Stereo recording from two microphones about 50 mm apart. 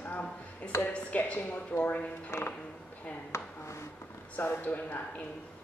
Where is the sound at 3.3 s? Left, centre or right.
Left.